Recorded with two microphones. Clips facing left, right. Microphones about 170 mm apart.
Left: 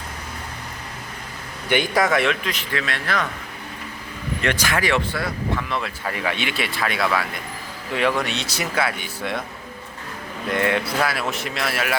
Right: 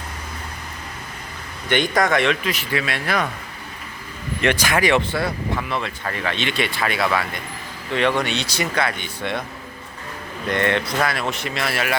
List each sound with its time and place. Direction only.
1.7 s speech: 10° left (ahead or behind); by 3.2 s 10° right (ahead or behind)
4.4 s speech: 15° right (ahead or behind)
5.6 s speech: centre (ahead or behind)
10.4 s speech: 5° left (ahead or behind)